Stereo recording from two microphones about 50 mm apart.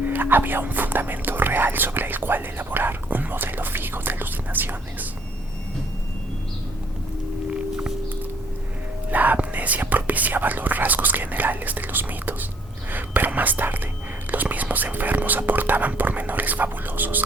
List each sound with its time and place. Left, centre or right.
0.0 s speech: right
9.0 s speech: right